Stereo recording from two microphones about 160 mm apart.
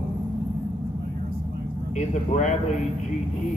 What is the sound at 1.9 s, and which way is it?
Speech, 50° left (ahead or behind).